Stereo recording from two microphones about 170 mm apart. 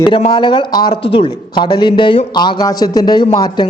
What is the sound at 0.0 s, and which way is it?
A man's voice, 30° left (ahead or behind).